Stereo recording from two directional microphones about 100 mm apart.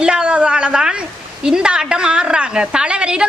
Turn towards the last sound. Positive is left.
turn(degrees=-10)  # may be behind; listen again after turning